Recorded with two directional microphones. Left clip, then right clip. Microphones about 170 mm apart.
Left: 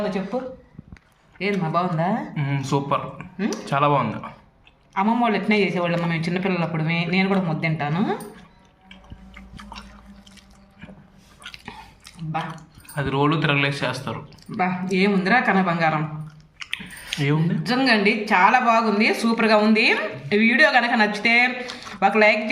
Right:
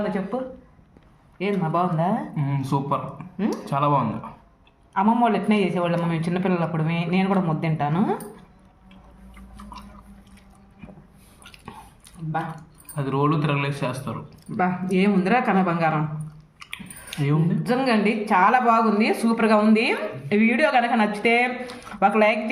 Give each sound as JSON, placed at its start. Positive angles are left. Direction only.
{"t": 1.4, "sound": "speech", "side_deg": -40}
{"t": 2.3, "sound": "speech", "side_deg": 5}
{"t": 4.9, "sound": "speech", "side_deg": -45}
{"t": 12.5, "sound": "speech", "side_deg": 5}
{"t": 14.5, "sound": "speech", "side_deg": -45}
{"t": 16.6, "sound": "chewing", "side_deg": 5}
{"t": 17.1, "sound": "speech", "side_deg": 0}
{"t": 17.6, "sound": "speech", "side_deg": -50}